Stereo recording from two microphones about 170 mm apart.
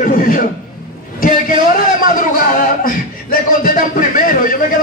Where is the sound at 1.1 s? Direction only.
50° left (ahead or behind).